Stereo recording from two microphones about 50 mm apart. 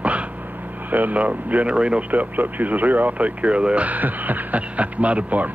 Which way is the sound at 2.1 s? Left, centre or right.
Right.